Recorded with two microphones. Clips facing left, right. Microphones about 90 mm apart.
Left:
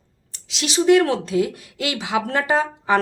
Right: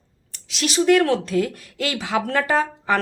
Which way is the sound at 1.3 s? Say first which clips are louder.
Left 1 dB; 45° right (ahead or behind).